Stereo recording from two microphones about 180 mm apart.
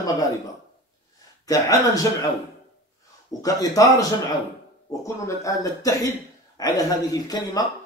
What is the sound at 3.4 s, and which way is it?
Speech, 20° left (ahead or behind).